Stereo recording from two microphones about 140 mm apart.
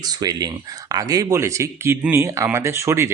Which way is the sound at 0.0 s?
30° right (ahead or behind).